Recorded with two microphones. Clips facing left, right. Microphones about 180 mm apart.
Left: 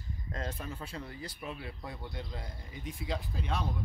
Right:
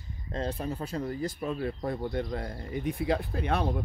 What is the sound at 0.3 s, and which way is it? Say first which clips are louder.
Speech: right 8 dB; 30° right (ahead or behind).